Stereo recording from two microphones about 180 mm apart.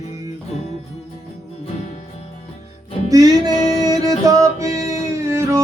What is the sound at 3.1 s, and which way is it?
Music, 20° right (ahead or behind).